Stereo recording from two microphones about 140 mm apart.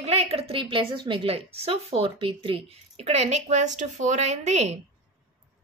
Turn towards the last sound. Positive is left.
turn(degrees=-55)  # may be behind; listen again after turning